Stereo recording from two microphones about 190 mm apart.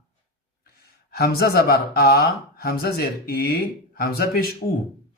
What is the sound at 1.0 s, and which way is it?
Speech, 55° left (ahead or behind).